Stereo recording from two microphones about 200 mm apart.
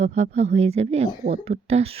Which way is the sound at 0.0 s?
35° right (ahead or behind).